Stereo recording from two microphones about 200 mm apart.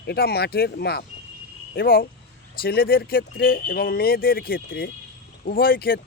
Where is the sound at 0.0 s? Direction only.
55° left (ahead or behind).